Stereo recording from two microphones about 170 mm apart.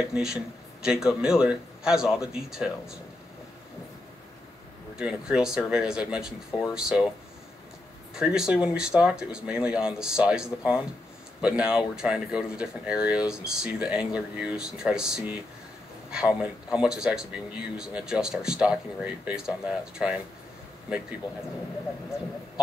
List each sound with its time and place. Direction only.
0.0 s speech: 5° right (ahead or behind)
4.9 s speech: 5° right (ahead or behind)
6.5 s speech: 30° left (ahead or behind)
8.1 s speech: 5° right (ahead or behind)